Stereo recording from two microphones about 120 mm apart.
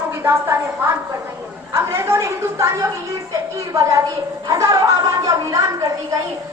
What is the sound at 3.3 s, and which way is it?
Music, 25° right (ahead or behind).